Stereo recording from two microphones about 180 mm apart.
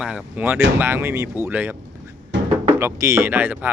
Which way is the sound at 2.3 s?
80° right.